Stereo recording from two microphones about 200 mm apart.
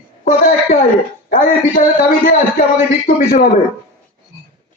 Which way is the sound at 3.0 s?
40° left (ahead or behind).